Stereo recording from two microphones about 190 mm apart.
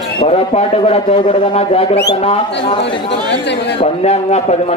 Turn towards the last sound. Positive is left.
turn(degrees=35)  # may be behind; listen again after turning